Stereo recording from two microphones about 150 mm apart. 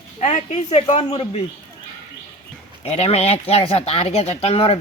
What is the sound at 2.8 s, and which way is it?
Speech, 45° left (ahead or behind).